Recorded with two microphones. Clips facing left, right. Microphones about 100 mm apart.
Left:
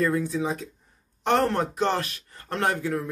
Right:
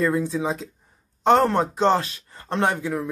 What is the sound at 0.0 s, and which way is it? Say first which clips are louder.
Speech: right 2 dB; 25° right (ahead or behind).